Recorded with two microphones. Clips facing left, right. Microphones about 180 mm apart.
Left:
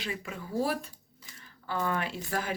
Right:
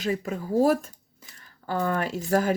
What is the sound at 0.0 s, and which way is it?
Speech, 40° right (ahead or behind).